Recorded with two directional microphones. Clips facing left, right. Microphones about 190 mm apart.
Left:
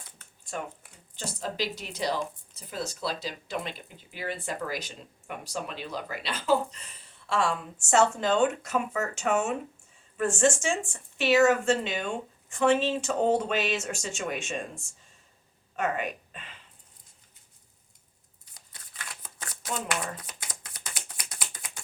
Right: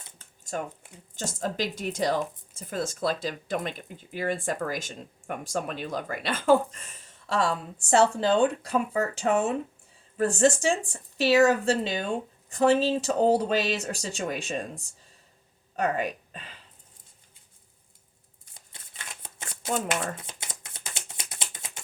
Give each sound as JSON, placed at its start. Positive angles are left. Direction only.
{"t": 1.1, "sound": "speech", "side_deg": -45}
{"t": 18.5, "sound": "shuffling cards", "side_deg": -25}